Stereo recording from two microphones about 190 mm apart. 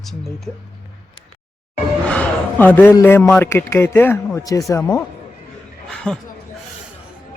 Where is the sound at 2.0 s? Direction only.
5° left (ahead or behind).